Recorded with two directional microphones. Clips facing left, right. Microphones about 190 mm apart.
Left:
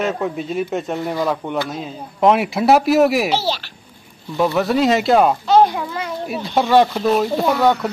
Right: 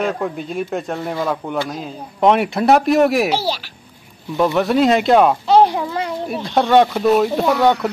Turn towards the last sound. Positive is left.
turn(degrees=0)  # may be behind; listen again after turning